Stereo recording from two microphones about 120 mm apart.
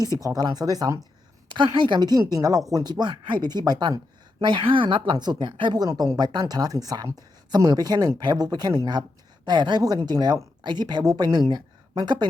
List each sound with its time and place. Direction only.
0.2 s speech: 30° right (ahead or behind)
1.5 s speech: 40° right (ahead or behind)